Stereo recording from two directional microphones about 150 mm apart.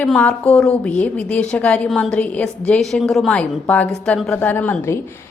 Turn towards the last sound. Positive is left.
turn(degrees=15)  # may be behind; listen again after turning